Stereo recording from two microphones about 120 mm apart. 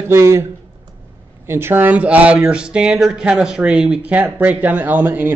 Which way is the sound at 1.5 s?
20° right (ahead or behind).